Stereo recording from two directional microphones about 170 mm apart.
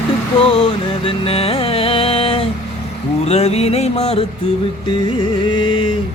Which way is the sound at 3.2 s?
35° left (ahead or behind).